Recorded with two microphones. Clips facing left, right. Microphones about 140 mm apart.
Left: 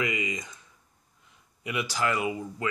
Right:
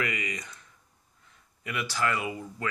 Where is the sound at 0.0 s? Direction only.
20° left (ahead or behind).